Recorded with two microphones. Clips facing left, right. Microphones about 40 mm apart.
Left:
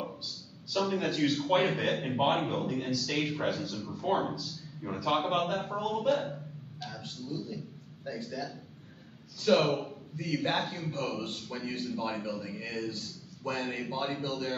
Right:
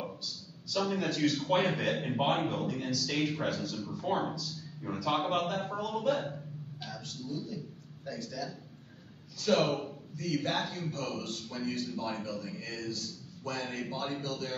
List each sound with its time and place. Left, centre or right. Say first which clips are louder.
0.0 s a sound: left 1 dB; centre
0.8 s a man's voice: left 1 dB; centre
6.9 s a man's voice: even; left
10.1 s a man's voice: left 2 dB; left